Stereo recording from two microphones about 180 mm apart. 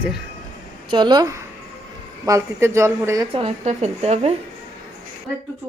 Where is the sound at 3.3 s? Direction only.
30° right (ahead or behind).